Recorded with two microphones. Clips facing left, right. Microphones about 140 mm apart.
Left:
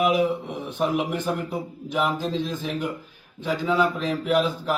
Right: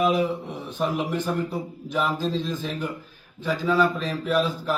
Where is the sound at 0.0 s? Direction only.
15° left (ahead or behind).